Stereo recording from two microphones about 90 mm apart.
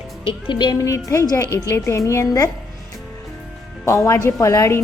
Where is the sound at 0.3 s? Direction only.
65° left (ahead or behind).